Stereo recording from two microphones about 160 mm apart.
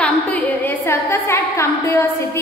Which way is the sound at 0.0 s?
5° left (ahead or behind).